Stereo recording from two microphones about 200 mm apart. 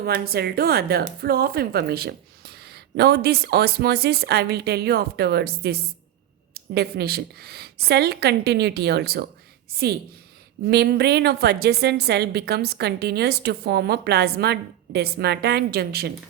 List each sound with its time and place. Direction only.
0.0 s a woman's voice: 50° right (ahead or behind)